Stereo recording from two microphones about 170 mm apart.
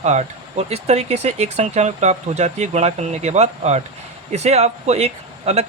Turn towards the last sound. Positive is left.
turn(degrees=-40)  # may be behind; listen again after turning